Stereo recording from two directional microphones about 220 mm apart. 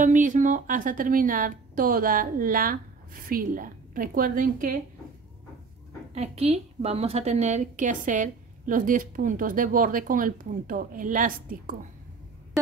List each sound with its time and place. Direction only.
0.0 s a woman's voice: 35° right (ahead or behind)
6.1 s a woman's voice: 25° right (ahead or behind)